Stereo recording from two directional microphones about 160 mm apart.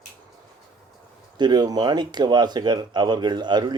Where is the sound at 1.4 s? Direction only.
25° right (ahead or behind).